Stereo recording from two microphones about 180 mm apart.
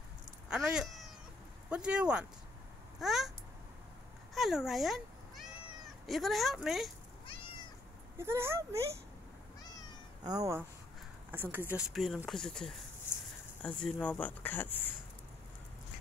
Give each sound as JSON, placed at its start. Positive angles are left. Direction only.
{"t": 0.5, "sound": "cat", "side_deg": 0}
{"t": 1.7, "sound": "speech", "side_deg": -5}
{"t": 3.0, "sound": "a sound", "side_deg": 0}
{"t": 4.3, "sound": "cat", "side_deg": 0}
{"t": 6.0, "sound": "speech", "side_deg": 0}
{"t": 8.2, "sound": "speech", "side_deg": -15}
{"t": 10.2, "sound": "speech", "side_deg": -20}